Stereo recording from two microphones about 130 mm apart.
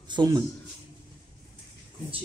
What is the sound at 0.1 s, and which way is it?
Speech, 35° right (ahead or behind).